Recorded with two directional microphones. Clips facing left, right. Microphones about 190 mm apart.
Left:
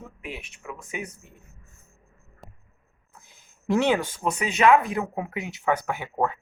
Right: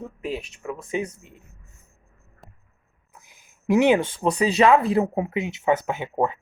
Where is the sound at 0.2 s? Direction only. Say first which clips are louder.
Right 9 dB; 35° right (ahead or behind).